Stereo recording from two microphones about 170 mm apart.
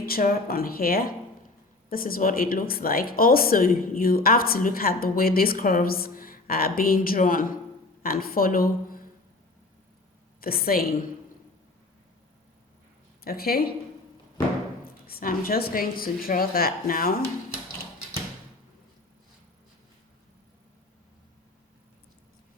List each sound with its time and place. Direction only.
0.0 s speech: 60° left (ahead or behind)
10.4 s speech: 60° left (ahead or behind)
13.2 s speech: 65° left (ahead or behind)
14.8 s speech: 60° left (ahead or behind)